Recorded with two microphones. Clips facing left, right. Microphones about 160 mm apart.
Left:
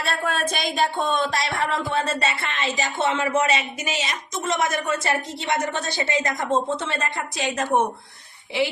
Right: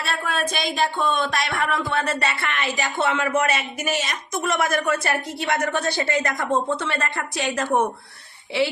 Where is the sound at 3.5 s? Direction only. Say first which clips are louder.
Right 2 dB; 50° right (ahead or behind).